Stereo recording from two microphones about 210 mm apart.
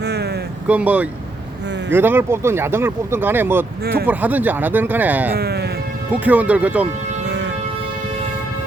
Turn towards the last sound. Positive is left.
turn(degrees=-55)  # may be behind; listen again after turning